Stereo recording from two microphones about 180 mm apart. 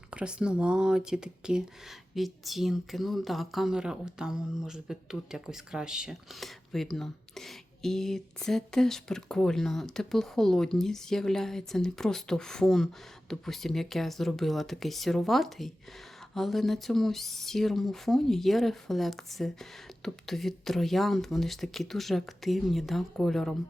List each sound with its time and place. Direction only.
0.1 s speech: 5° right (ahead or behind)